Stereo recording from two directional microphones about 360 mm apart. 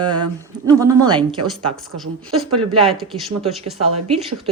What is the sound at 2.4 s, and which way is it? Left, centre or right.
Speech, centre.